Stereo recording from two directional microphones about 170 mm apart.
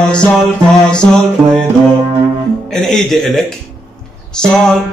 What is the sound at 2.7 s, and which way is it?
Speech, centre (ahead or behind).